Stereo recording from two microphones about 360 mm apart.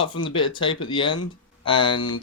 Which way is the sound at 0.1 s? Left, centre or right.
Centre.